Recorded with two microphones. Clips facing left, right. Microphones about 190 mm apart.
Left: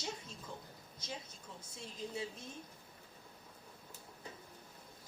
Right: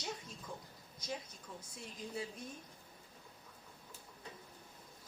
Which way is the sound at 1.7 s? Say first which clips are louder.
Left 1 dB; 25° left (ahead or behind).